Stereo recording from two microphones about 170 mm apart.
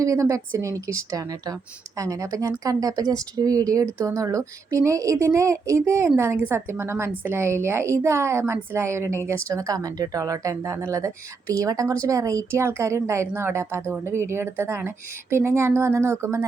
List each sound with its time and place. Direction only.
0.0 s a woman's voice: 20° right (ahead or behind)